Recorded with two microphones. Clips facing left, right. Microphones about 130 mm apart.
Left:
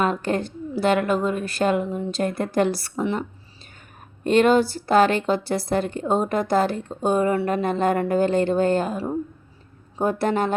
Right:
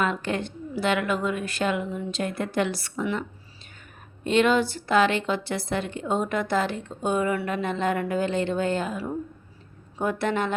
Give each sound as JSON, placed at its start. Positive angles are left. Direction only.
{"t": 0.0, "sound": "a woman's voice", "side_deg": 40}
{"t": 4.2, "sound": "a woman's voice", "side_deg": 45}
{"t": 10.0, "sound": "a woman's voice", "side_deg": 35}